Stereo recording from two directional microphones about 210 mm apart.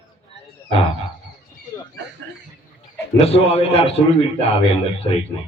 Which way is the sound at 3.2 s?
30° left (ahead or behind).